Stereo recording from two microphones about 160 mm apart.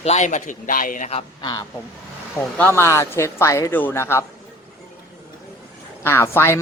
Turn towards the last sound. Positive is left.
turn(degrees=15)  # may be behind; listen again after turning